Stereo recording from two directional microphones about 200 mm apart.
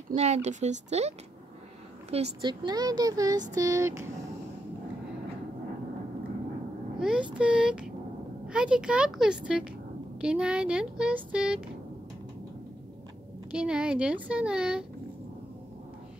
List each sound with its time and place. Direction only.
0.1 s speech: 35° right (ahead or behind); by 3.4 s 20° right (ahead or behind)
3.5 s a sound: 15° right (ahead or behind)
7.0 s a child's voice: 5° right (ahead or behind)
13.5 s speech: 5° right (ahead or behind)